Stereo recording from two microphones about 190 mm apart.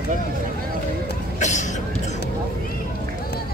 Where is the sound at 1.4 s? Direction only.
40° left (ahead or behind).